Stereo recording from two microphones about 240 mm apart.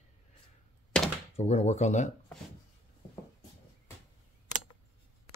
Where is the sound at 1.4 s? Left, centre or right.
Left.